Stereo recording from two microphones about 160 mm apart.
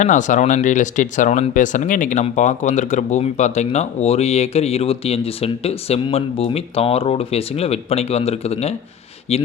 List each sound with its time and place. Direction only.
0.0 s speech: 50° left (ahead or behind)